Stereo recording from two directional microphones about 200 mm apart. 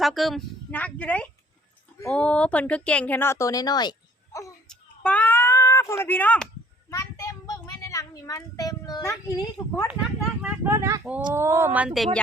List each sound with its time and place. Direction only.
0.0 s speech: centre (ahead or behind); by 4.5 s 15° left (ahead or behind)
4.7 s a sound: 5° left (ahead or behind)
6.9 s child singing: 15° left (ahead or behind)
10.4 s speech: 10° right (ahead or behind)